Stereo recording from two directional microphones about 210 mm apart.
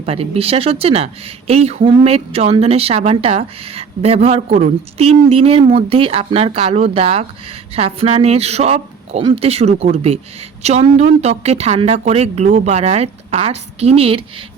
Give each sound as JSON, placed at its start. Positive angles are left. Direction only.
{"t": 0.0, "sound": "speech", "side_deg": -30}